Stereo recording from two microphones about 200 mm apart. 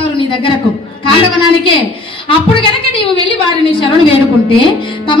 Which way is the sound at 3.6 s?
25° left (ahead or behind).